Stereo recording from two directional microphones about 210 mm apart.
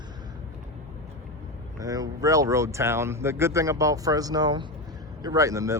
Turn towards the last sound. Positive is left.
turn(degrees=-15)  # may be behind; listen again after turning